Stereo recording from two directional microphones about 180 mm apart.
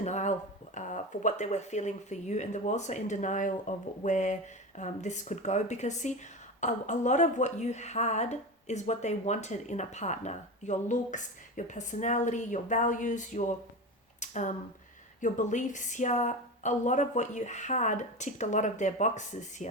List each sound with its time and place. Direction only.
0.0 s speech: 40° left (ahead or behind)
14.2 s a sound: 40° left (ahead or behind)
15.2 s speech: 45° left (ahead or behind)